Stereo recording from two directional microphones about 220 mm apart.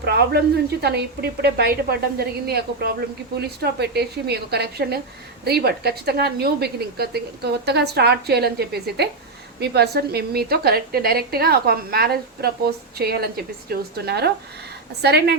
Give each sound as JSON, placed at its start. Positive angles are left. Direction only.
{"t": 0.0, "sound": "a woman's voice", "side_deg": -45}